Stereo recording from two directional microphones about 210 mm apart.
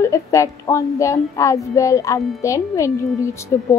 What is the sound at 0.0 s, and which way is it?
Speech, 15° left (ahead or behind).